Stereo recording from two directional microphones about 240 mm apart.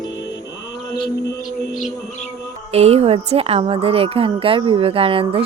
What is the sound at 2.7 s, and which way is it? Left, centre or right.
A woman's voice, right.